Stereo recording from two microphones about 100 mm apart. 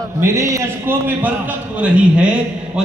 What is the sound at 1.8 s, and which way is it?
Speech, 10° right (ahead or behind).